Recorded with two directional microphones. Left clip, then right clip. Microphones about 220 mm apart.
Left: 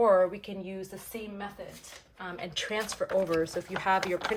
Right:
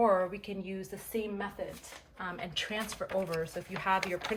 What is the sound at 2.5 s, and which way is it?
Speech, 20° left (ahead or behind).